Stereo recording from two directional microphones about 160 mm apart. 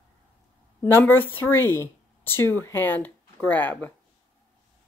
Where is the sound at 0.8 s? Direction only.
15° left (ahead or behind).